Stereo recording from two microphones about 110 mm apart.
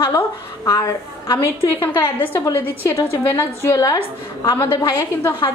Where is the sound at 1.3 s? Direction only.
25° left (ahead or behind).